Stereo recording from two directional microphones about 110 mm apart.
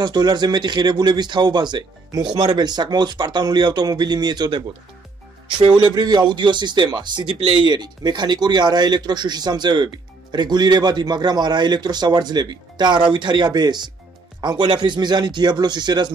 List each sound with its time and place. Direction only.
0.0 s speech: 40° right (ahead or behind)
5.8 s speech: 40° right (ahead or behind)